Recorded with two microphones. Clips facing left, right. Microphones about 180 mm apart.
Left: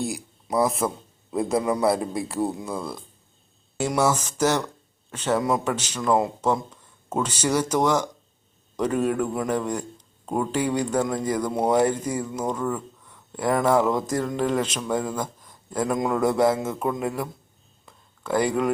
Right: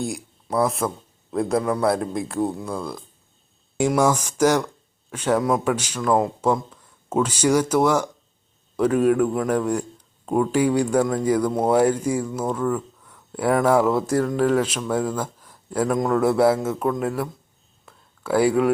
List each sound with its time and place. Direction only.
0.4 s a man's voice: 5° left (ahead or behind)
3.8 s speech: 10° right (ahead or behind)
6.0 s a man's voice: centre (ahead or behind)
7.1 s speech: 10° right (ahead or behind)
11.3 s speech: 10° left (ahead or behind)
11.6 s a man's voice: 10° right (ahead or behind)
17.8 s a sound: 5° right (ahead or behind)